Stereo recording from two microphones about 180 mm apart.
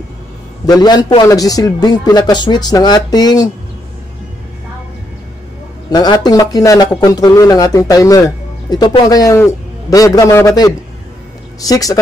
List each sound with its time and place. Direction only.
0.7 s speech: 20° left (ahead or behind)
5.9 s speech: 20° left (ahead or behind)